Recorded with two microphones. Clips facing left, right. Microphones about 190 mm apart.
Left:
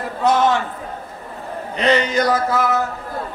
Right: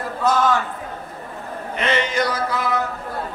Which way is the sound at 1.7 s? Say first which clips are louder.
Left 4 dB; 40° left (ahead or behind).